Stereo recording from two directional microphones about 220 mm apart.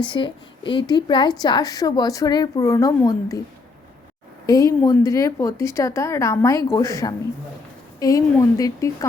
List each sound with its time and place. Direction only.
0.0 s a woman's voice: 20° left (ahead or behind)
4.4 s speech: 15° left (ahead or behind)